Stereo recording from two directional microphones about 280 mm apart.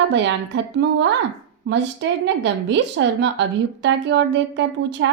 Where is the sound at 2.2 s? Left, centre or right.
Right.